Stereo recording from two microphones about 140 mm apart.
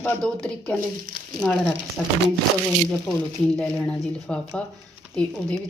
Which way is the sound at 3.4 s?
5° left (ahead or behind).